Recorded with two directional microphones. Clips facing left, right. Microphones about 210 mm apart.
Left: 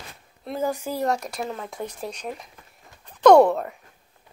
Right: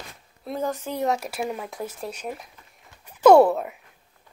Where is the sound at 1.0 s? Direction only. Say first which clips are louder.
Right 1 dB; 5° right (ahead or behind).